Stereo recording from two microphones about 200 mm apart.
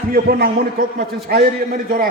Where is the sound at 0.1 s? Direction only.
50° right (ahead or behind).